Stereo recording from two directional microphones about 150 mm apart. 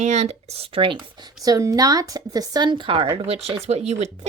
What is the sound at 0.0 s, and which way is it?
Speech, 50° right (ahead or behind).